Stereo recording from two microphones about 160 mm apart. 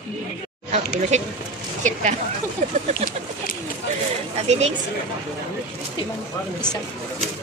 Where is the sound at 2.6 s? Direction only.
55° right (ahead or behind).